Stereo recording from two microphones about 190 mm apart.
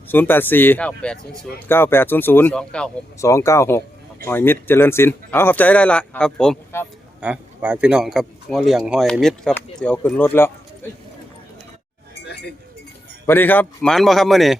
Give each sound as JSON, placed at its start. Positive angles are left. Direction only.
{"t": 0.1, "sound": "speech", "side_deg": 10}
{"t": 3.2, "sound": "speech", "side_deg": 15}
{"t": 7.2, "sound": "a man's voice", "side_deg": -5}
{"t": 13.2, "sound": "a man's voice", "side_deg": 10}